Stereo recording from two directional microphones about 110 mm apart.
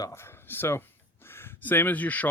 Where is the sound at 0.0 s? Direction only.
25° left (ahead or behind).